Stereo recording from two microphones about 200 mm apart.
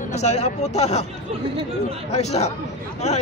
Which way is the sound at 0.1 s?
35° left (ahead or behind).